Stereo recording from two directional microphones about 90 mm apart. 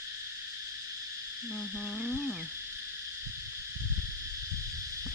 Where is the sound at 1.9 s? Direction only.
15° left (ahead or behind).